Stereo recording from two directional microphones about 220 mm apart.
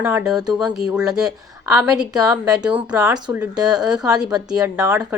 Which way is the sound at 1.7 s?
15° right (ahead or behind).